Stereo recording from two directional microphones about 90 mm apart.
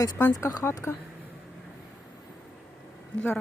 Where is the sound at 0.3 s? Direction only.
45° left (ahead or behind).